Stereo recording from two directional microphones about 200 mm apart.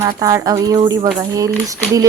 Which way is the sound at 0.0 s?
15° right (ahead or behind).